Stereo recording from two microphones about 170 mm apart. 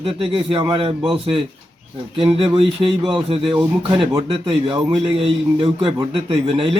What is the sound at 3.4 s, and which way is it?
Speech, 10° right (ahead or behind).